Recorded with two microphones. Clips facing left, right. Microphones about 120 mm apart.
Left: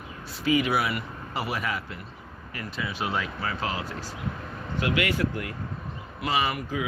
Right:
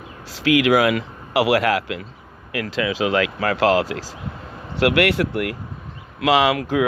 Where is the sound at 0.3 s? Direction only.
90° right.